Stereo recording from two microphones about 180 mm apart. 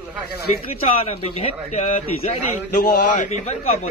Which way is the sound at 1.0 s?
35° left (ahead or behind).